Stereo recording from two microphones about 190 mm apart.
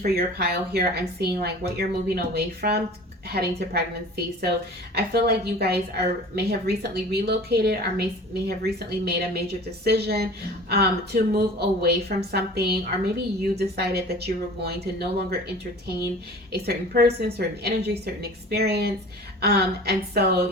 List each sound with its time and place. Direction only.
0.0 s a woman's voice: 55° right (ahead or behind)
4.9 s a woman's voice: 55° right (ahead or behind)
16.5 s a woman's voice: 55° right (ahead or behind)